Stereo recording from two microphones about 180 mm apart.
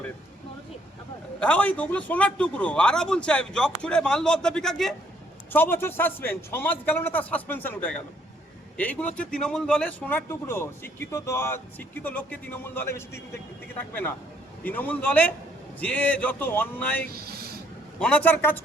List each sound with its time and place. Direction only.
1.4 s a man's voice: 10° left (ahead or behind)
14.6 s a man's voice: 10° left (ahead or behind)
17.2 s a sound: 60° right (ahead or behind)
18.0 s a man's voice: 10° left (ahead or behind)